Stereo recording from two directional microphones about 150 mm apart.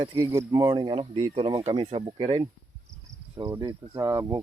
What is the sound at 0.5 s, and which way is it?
Speech, 25° right (ahead or behind).